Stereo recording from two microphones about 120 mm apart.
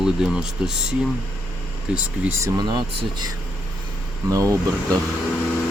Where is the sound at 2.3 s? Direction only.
25° right (ahead or behind).